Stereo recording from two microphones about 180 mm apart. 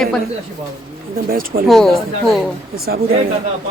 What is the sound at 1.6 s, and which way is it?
Speech, centre (ahead or behind).